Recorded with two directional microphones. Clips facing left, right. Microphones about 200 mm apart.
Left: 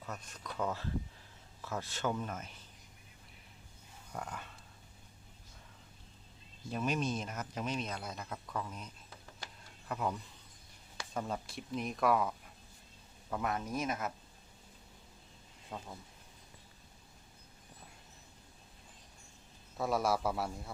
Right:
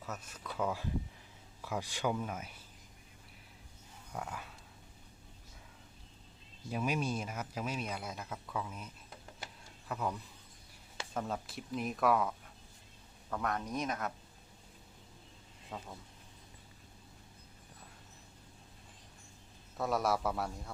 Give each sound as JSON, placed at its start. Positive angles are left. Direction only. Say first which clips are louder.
{"t": 0.0, "sound": "speech", "louder": "right 1 dB", "side_deg": -5}
{"t": 4.1, "sound": "dog", "louder": "right 1 dB", "side_deg": -5}
{"t": 6.7, "sound": "speech", "louder": "even", "side_deg": -10}
{"t": 9.9, "sound": "speech", "louder": "left 1 dB", "side_deg": 0}
{"t": 13.3, "sound": "speech", "louder": "even", "side_deg": 5}
{"t": 15.7, "sound": "speech", "louder": "even", "side_deg": 0}
{"t": 19.7, "sound": "speech", "louder": "even", "side_deg": 0}